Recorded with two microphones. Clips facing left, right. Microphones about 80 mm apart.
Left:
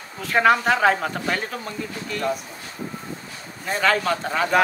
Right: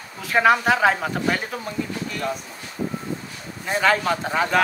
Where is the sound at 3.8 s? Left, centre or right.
Centre.